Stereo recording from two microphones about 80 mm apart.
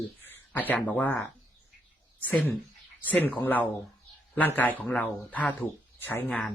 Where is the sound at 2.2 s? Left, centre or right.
Left.